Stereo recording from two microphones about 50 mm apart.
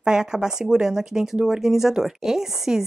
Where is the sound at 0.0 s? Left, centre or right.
Centre.